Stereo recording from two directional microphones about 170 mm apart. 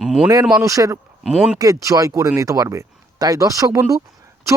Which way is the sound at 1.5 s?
20° right (ahead or behind).